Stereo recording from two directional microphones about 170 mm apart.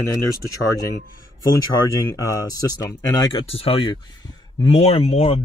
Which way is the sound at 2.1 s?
20° left (ahead or behind).